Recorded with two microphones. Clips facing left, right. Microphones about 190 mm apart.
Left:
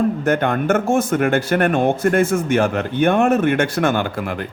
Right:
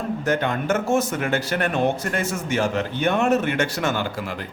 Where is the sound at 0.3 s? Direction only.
55° left (ahead or behind).